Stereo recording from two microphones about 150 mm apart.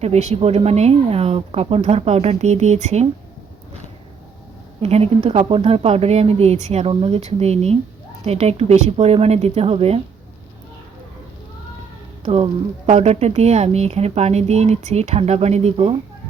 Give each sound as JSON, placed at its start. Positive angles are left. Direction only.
{"t": 0.0, "sound": "speech", "side_deg": -45}
{"t": 4.8, "sound": "speech", "side_deg": -45}
{"t": 12.2, "sound": "speech", "side_deg": -40}